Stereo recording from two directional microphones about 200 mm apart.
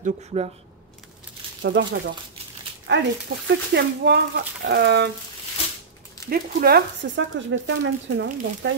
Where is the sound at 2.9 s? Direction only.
60° right (ahead or behind).